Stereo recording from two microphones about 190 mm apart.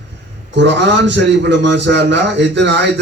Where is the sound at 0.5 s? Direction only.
65° right (ahead or behind).